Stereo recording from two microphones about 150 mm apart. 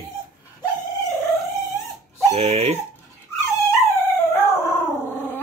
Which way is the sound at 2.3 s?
45° right (ahead or behind).